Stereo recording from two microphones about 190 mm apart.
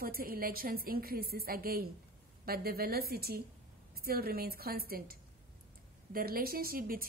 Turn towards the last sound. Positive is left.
turn(degrees=-50)  # may be behind; listen again after turning